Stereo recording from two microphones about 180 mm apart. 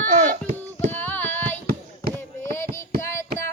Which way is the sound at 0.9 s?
10° left (ahead or behind).